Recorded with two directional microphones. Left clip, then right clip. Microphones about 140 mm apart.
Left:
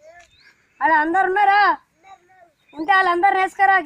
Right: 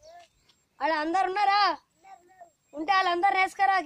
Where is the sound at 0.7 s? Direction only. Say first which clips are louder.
Left 9 dB; 40° right (ahead or behind).